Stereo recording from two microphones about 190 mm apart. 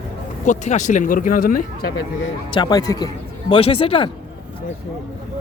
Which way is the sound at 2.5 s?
25° left (ahead or behind).